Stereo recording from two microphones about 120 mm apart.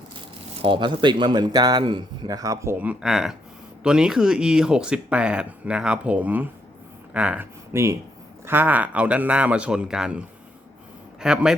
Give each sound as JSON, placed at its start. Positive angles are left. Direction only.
{"t": 0.6, "sound": "speech", "side_deg": -45}
{"t": 2.8, "sound": "speech", "side_deg": -5}
{"t": 7.7, "sound": "speech", "side_deg": -25}